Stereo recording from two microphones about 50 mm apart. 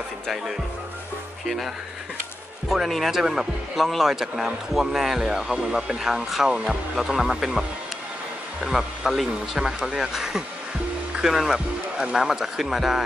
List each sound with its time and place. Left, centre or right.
2.7 s speech: centre
8.6 s speech: centre